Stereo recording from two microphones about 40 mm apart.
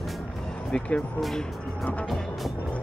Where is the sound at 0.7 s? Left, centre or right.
Left.